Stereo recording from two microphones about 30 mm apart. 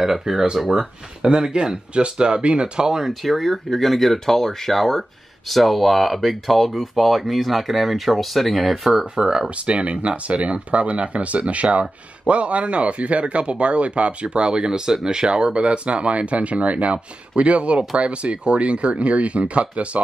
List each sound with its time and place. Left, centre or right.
0.0 s speech: centre
0.7 s speech: right
3.1 s speech: centre
9.1 s speech: right
9.7 s speech: right